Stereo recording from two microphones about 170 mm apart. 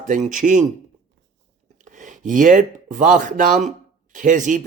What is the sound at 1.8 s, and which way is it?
A man's voice, 50° right (ahead or behind).